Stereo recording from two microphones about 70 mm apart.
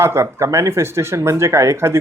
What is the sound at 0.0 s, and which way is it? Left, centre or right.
Speech, right.